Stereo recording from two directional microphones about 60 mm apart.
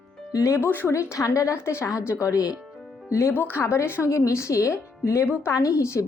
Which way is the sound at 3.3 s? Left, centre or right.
Left.